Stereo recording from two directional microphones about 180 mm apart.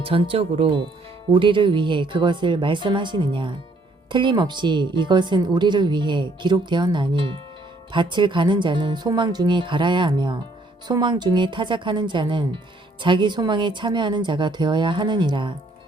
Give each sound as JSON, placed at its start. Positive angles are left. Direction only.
{"t": 0.0, "sound": "speech", "side_deg": -30}